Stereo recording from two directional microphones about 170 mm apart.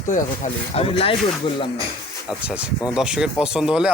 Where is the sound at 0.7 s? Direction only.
35° left (ahead or behind).